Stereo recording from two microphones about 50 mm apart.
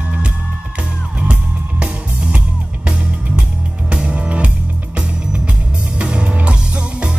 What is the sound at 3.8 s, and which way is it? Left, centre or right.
Music, right.